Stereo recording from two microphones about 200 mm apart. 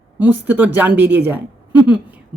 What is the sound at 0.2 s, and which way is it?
A woman's voice, 10° right (ahead or behind).